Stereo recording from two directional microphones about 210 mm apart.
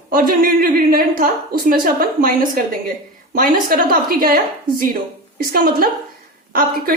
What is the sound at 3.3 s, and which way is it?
Speech, 40° right (ahead or behind).